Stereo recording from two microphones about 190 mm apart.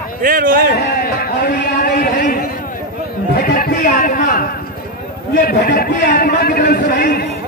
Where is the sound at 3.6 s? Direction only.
45° left (ahead or behind).